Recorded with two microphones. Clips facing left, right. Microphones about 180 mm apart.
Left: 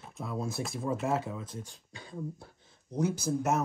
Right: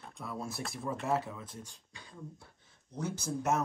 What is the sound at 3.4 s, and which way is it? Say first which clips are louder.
Speech: left 1 dB; 5° left (ahead or behind).